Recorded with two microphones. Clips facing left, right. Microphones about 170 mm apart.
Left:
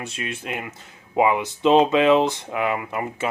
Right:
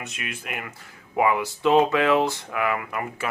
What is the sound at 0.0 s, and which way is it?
Speech, 30° left (ahead or behind).